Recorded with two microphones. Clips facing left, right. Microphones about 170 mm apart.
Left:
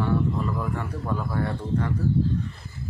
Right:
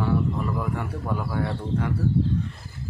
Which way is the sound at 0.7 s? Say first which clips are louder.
Even; 10° right (ahead or behind).